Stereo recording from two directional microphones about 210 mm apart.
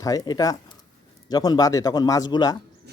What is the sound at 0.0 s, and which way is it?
A man's voice, 15° left (ahead or behind).